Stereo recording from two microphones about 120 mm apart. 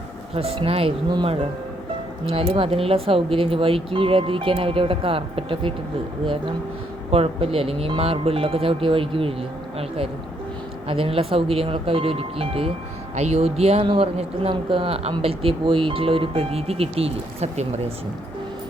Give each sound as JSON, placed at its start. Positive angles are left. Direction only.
{"t": 0.3, "sound": "speech", "side_deg": -55}
{"t": 7.1, "sound": "speech", "side_deg": -55}
{"t": 13.1, "sound": "speech", "side_deg": -65}